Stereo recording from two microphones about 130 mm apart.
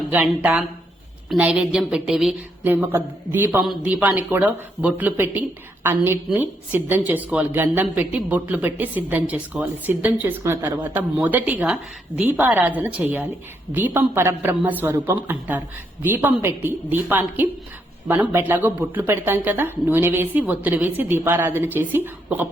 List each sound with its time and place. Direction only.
0.1 s a woman's voice: 10° right (ahead or behind)
2.6 s a woman's voice: 15° right (ahead or behind)